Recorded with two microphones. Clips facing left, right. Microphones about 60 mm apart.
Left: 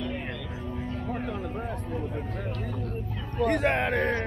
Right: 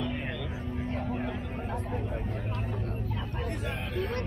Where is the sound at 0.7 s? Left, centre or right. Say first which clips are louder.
Right 1 dB; right.